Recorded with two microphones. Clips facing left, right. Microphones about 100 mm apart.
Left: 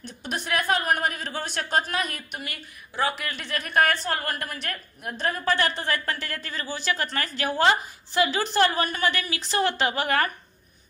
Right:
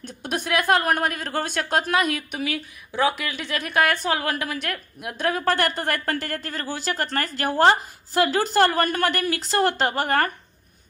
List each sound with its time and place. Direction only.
0.3 s a woman's voice: 65° right (ahead or behind)
3.1 s a woman's voice: 90° right; by 10.3 s 45° right (ahead or behind)